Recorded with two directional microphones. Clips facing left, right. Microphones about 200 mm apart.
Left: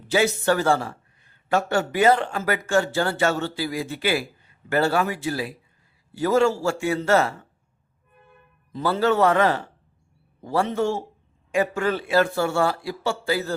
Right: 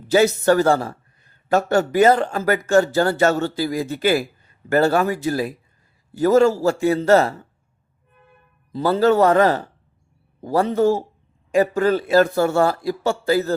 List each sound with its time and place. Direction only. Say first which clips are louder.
0.1 s a man's voice: right 5 dB; 40° right (ahead or behind)
8.7 s a man's voice: right 5 dB; 40° right (ahead or behind)